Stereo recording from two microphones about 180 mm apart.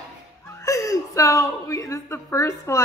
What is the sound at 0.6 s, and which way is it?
A woman's voice, 20° left (ahead or behind).